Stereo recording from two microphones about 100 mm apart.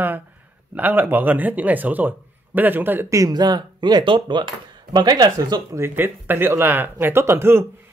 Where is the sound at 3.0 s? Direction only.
35° right (ahead or behind).